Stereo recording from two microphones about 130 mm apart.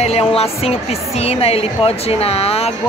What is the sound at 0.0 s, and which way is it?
Speech, 50° left (ahead or behind).